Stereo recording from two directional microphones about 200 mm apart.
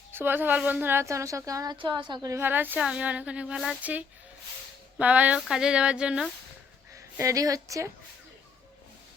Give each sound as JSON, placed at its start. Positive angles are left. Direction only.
{"t": 0.1, "sound": "speech", "side_deg": -10}
{"t": 6.9, "sound": "a woman's voice", "side_deg": -15}